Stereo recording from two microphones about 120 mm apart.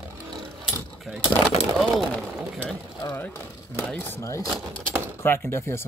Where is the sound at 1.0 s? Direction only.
5° right (ahead or behind).